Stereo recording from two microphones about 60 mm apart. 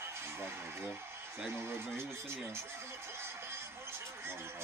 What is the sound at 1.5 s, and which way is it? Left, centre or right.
Speech, right.